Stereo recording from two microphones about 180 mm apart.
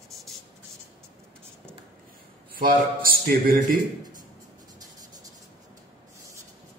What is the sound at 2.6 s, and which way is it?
A man's voice, 50° right (ahead or behind).